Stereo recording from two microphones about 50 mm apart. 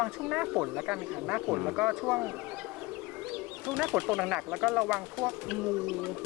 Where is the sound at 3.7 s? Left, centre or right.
Centre.